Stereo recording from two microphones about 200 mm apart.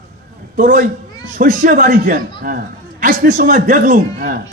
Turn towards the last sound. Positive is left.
turn(degrees=-40)  # may be behind; listen again after turning